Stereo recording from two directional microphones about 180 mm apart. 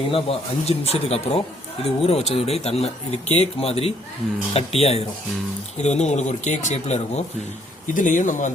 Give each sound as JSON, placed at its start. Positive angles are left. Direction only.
{"t": 0.1, "sound": "speech", "side_deg": 35}